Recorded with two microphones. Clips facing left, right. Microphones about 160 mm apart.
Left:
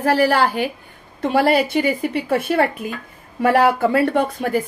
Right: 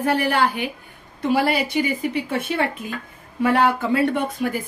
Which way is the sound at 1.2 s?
55° left (ahead or behind).